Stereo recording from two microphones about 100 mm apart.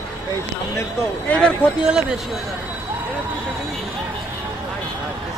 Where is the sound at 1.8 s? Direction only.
10° right (ahead or behind).